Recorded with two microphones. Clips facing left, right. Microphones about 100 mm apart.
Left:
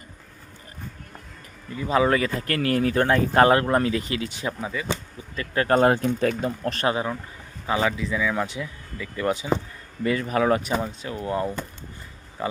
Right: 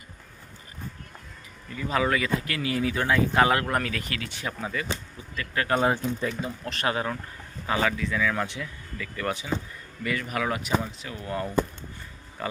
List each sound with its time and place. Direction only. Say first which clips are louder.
1.7 s speech: left 5 dB; 25° left (ahead or behind); by 3.5 s 45° left (ahead or behind)
3.5 s speech: left 6 dB; 30° left (ahead or behind)
5.4 s speech: left 5 dB; 35° left (ahead or behind)
5.8 s speech: left 6 dB; 60° left (ahead or behind)
6.9 s speech: left 2 dB; 15° left (ahead or behind)